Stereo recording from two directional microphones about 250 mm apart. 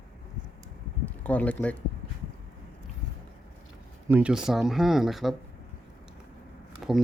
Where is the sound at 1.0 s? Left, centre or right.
Centre.